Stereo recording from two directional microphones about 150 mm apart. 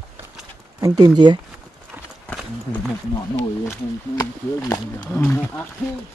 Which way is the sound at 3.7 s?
20° left (ahead or behind).